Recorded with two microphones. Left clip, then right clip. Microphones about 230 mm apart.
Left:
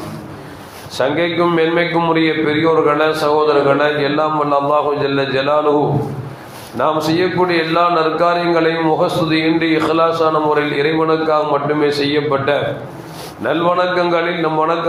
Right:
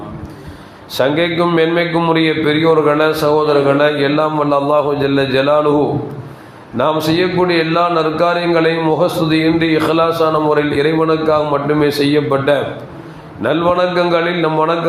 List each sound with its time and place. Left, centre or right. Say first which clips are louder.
0.9 s a man's voice: right 2 dB; right
6.7 s a man's voice: right 1 dB; right